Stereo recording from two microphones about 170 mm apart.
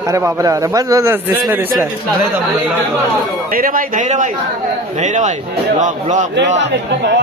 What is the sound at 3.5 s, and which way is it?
A man's voice, 55° right (ahead or behind).